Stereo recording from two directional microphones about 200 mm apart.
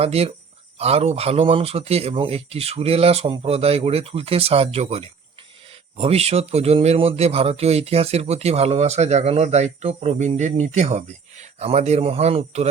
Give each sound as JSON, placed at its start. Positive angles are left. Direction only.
{"t": 0.0, "sound": "speech", "side_deg": -30}